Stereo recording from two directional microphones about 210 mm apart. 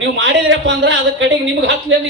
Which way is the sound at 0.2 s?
60° right (ahead or behind).